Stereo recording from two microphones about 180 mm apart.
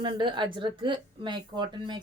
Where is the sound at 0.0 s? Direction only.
25° right (ahead or behind).